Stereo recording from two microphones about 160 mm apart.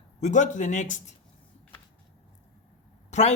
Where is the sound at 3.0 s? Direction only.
45° left (ahead or behind).